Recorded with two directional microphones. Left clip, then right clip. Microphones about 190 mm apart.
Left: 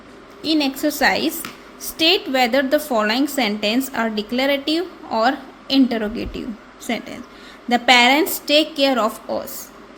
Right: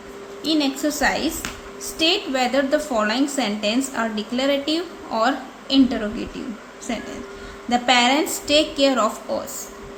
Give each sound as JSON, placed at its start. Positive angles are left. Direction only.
{"t": 0.4, "sound": "a woman's voice", "side_deg": 30}